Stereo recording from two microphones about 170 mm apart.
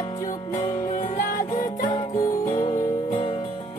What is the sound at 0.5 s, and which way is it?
Music, 50° left (ahead or behind).